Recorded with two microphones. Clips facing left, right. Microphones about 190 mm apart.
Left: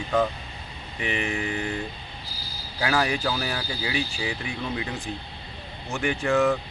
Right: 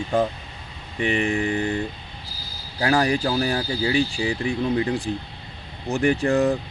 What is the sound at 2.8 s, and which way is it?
Speech, 35° right (ahead or behind).